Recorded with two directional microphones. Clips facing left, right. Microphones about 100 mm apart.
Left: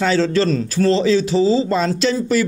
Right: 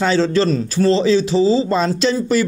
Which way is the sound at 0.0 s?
25° right (ahead or behind).